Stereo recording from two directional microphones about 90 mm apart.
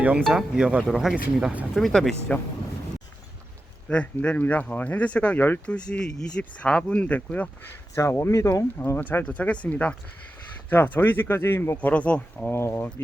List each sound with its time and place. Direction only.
0.3 s speech: 10° right (ahead or behind)
0.9 s speech: centre (ahead or behind)
1.7 s speech: 5° left (ahead or behind)
3.8 s speech: 15° left (ahead or behind)
7.9 s speech: 30° left (ahead or behind)
9.0 s speech: 20° left (ahead or behind)
11.8 s speech: 15° left (ahead or behind)
12.5 s speech: 30° left (ahead or behind)